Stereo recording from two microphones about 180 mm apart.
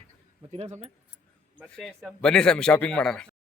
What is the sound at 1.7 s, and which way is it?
A man's voice, 5° left (ahead or behind).